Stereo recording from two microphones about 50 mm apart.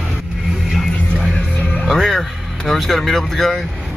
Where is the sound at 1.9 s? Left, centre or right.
Centre.